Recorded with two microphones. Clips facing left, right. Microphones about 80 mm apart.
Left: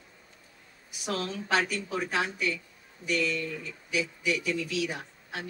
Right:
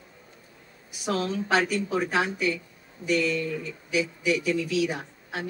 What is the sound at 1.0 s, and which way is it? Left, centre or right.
Speech, centre.